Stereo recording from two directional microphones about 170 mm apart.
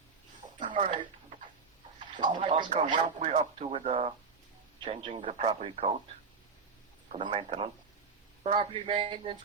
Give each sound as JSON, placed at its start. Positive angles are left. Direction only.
{"t": 0.7, "sound": "speech", "side_deg": -30}
{"t": 2.1, "sound": "speech", "side_deg": -25}
{"t": 7.1, "sound": "speech", "side_deg": -30}